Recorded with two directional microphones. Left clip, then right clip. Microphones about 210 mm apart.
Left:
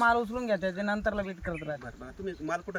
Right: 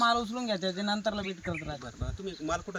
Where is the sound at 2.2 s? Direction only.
Centre (ahead or behind).